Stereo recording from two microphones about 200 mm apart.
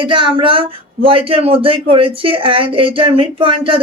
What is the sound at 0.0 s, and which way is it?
Speech, 25° right (ahead or behind).